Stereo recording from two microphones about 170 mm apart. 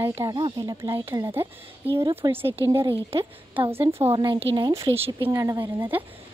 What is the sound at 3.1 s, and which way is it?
Speech, 35° right (ahead or behind).